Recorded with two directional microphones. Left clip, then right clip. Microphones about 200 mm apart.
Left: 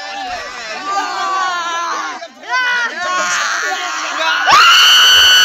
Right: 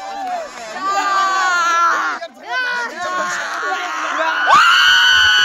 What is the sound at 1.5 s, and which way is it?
Baby cry, 10° left (ahead or behind).